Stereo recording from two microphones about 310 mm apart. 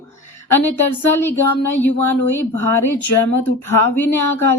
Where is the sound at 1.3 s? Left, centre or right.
Left.